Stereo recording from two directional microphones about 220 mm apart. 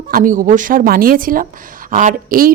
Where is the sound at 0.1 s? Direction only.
40° right (ahead or behind).